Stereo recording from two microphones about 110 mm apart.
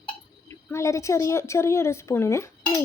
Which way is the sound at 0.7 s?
25° left (ahead or behind).